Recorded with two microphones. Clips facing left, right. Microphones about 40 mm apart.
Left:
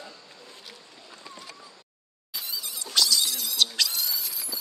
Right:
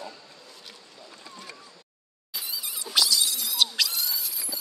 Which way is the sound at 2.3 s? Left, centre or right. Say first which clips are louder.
Even; centre.